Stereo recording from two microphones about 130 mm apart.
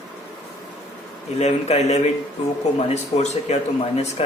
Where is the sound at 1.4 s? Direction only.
55° left (ahead or behind).